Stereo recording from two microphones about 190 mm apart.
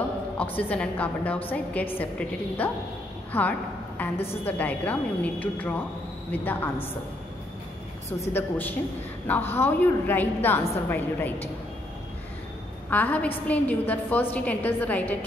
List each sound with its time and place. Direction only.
0.7 s a woman's voice: 10° left (ahead or behind)
4.0 s a sound: 10° left (ahead or behind)
4.5 s a woman's voice: 10° left (ahead or behind)
8.2 s a woman's voice: 10° left (ahead or behind)
12.9 s a woman's voice: 10° left (ahead or behind)